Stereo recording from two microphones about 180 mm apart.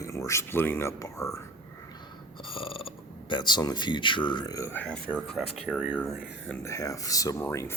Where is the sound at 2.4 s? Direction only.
30° left (ahead or behind); by 5.2 s 5° left (ahead or behind).